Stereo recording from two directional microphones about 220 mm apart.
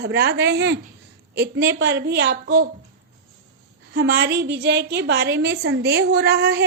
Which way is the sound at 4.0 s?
45° right (ahead or behind).